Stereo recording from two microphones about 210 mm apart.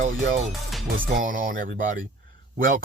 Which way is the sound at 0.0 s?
35° right (ahead or behind).